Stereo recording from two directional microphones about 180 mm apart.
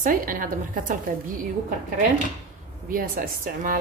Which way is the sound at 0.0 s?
50° right (ahead or behind).